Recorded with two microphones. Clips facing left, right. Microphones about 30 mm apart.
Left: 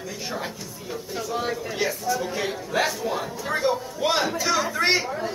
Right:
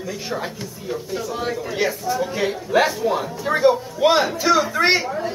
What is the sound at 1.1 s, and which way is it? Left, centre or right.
A man's voice, centre.